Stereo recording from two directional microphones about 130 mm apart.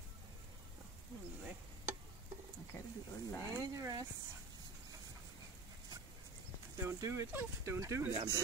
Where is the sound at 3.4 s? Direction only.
20° right (ahead or behind).